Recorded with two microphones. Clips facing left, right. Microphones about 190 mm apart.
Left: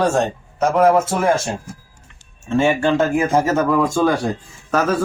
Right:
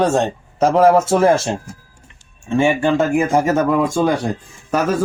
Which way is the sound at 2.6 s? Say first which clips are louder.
Right 1 dB; 15° right (ahead or behind).